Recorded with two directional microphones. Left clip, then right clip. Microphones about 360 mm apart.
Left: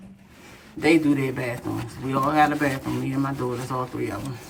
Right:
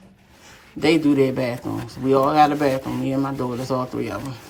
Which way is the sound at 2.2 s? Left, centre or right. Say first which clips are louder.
Right 2 dB; right.